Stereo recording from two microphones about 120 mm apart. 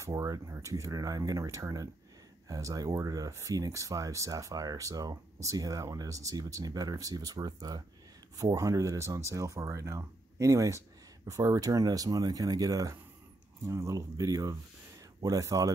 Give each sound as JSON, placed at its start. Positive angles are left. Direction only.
{"t": 0.0, "sound": "speech", "side_deg": -25}